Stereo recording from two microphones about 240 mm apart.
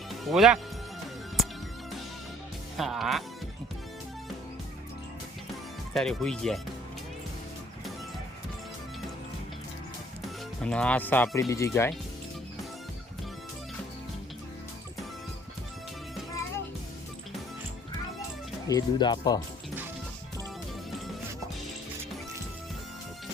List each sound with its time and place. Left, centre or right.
0.3 s speech: centre
2.7 s speech: centre
5.9 s speech: centre
10.6 s speech: centre
18.7 s speech: centre